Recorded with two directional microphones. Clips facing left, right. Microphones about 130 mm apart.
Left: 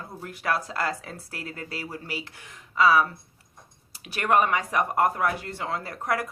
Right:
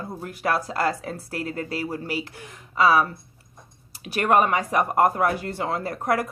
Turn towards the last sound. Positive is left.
turn(degrees=-35)  # may be behind; listen again after turning